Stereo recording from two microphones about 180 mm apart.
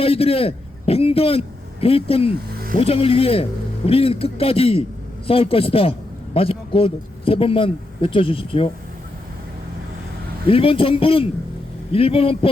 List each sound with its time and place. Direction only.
0.0 s a man's voice: 30° left (ahead or behind)
10.4 s speech: 30° left (ahead or behind)